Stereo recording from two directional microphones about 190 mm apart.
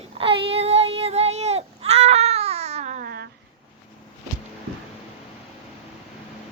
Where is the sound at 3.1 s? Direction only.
60° right (ahead or behind).